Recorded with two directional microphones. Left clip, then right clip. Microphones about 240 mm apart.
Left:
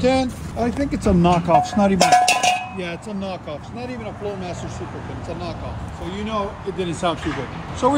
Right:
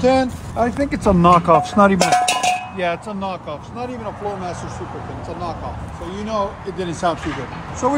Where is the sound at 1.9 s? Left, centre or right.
Centre.